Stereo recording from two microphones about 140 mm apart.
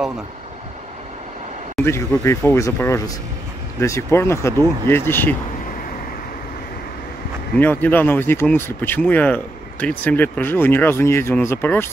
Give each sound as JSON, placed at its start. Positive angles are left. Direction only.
{"t": 1.9, "sound": "speech", "side_deg": 20}
{"t": 7.5, "sound": "speech", "side_deg": 15}